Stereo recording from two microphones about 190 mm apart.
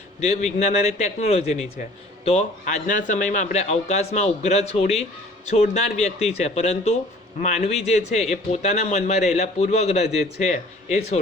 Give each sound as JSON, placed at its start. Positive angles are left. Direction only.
{"t": 0.2, "sound": "a man's voice", "side_deg": 35}